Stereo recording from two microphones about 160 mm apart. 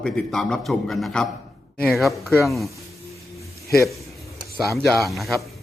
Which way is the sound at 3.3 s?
Centre (ahead or behind).